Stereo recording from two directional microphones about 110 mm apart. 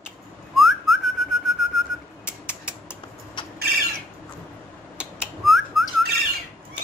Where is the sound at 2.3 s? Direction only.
20° left (ahead or behind).